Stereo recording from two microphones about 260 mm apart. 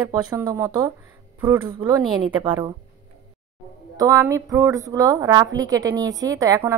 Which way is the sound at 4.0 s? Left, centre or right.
Centre.